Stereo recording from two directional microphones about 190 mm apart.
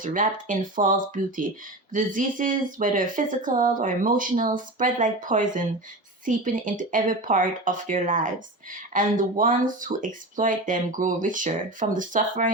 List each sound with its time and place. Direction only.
0.0 s speech: 45° right (ahead or behind)